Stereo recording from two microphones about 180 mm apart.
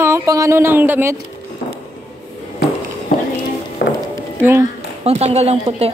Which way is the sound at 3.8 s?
65° left (ahead or behind).